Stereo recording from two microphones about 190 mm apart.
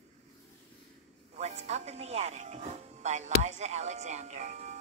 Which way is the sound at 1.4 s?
35° right (ahead or behind).